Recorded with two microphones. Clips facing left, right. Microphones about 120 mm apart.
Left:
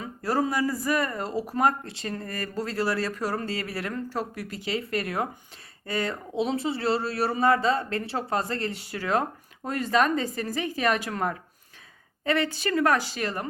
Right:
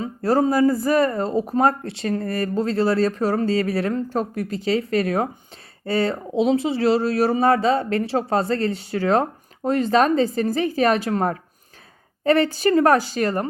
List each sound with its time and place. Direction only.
0.3 s a woman's voice: 30° right (ahead or behind)